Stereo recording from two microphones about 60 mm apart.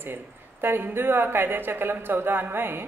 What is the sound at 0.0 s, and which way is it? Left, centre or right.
Speech, right.